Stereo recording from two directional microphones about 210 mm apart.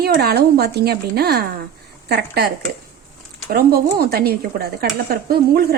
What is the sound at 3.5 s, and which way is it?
Speech, 45° right (ahead or behind).